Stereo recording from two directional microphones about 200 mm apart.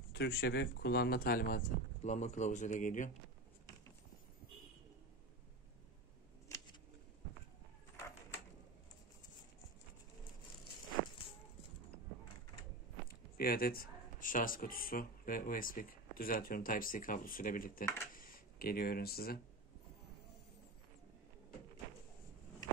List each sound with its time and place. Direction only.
0.1 s speech: 55° left (ahead or behind)
13.1 s speech: 50° left (ahead or behind)
18.1 s a sound: 45° left (ahead or behind)